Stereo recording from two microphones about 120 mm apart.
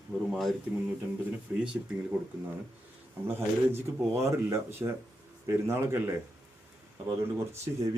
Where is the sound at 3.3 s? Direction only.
20° right (ahead or behind).